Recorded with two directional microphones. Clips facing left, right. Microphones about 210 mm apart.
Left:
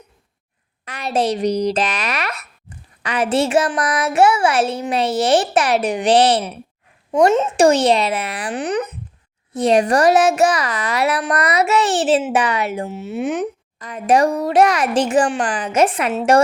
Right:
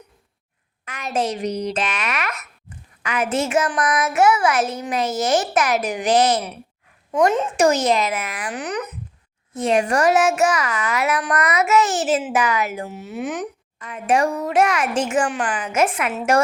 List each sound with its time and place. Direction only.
0.9 s a child's voice: 35° left (ahead or behind)